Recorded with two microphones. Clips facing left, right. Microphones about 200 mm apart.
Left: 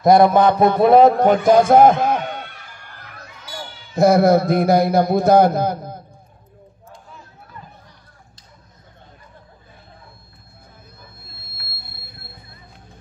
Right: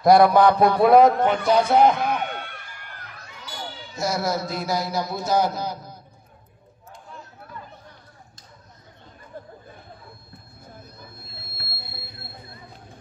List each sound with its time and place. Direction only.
0.0 s a man's voice: 20° left (ahead or behind); by 2.2 s 45° left (ahead or behind)
3.9 s a man's voice: 55° left (ahead or behind)
11.8 s train: 50° left (ahead or behind)